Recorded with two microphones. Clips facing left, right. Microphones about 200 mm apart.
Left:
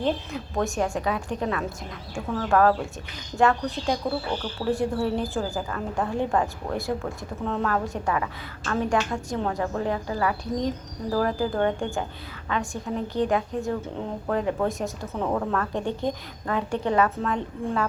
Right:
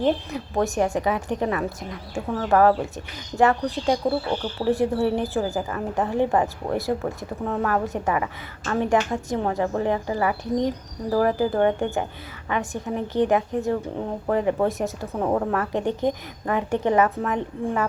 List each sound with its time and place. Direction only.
0.5 s a woman's voice: 15° right (ahead or behind)